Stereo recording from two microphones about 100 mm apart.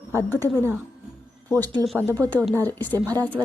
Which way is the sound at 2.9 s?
35° right (ahead or behind).